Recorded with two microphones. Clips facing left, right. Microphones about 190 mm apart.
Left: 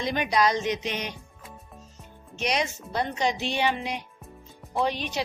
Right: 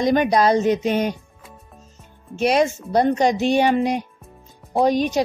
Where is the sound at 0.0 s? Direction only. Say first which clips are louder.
Right 8 dB; 45° right (ahead or behind).